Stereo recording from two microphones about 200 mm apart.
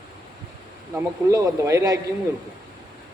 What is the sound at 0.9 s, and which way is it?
Speech, 15° right (ahead or behind).